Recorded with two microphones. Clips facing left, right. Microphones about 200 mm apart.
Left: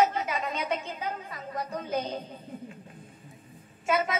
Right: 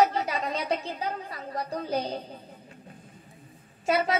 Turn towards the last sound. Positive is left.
turn(degrees=-35)  # may be behind; listen again after turning